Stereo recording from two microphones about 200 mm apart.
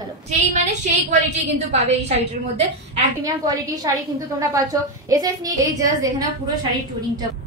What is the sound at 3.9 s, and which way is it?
A woman's voice, 20° right (ahead or behind).